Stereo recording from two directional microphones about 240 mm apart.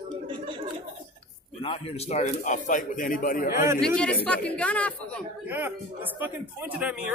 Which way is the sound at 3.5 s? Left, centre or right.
Centre.